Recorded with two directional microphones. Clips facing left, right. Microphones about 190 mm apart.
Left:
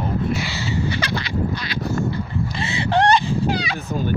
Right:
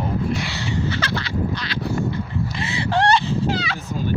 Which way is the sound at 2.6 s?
25° left (ahead or behind).